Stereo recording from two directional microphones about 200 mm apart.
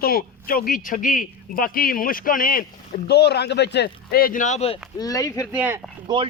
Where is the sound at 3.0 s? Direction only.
55° left (ahead or behind); by 4.7 s 35° left (ahead or behind).